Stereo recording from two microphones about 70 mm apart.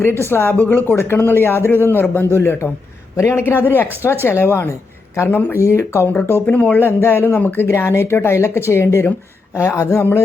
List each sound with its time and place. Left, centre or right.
0.0 s a man's voice: left
5.5 s a man's voice: left
6.4 s a man's voice: left